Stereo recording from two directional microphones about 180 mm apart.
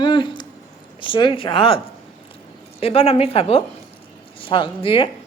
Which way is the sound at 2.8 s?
35° left (ahead or behind).